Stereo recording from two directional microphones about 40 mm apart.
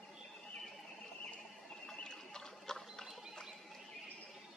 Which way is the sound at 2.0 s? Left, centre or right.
Centre.